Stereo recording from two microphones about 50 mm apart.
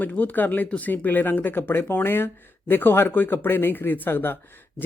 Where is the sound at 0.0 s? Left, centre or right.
Left.